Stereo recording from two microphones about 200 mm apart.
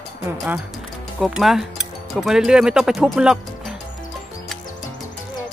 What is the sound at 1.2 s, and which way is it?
Speech, centre (ahead or behind).